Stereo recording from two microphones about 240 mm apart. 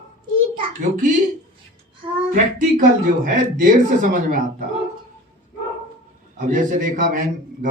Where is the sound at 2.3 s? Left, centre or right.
Right.